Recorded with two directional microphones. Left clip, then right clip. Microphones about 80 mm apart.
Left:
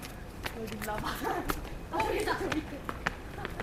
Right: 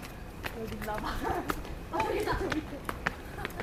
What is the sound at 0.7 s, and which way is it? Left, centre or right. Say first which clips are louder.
Speech: even; left.